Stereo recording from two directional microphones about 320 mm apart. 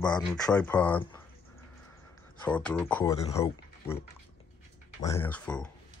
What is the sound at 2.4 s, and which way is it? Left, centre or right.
Speech, centre.